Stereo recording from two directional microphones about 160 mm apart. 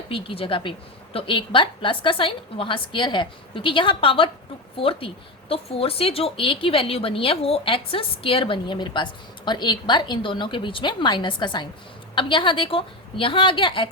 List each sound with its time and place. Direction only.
0.1 s speech: 35° left (ahead or behind)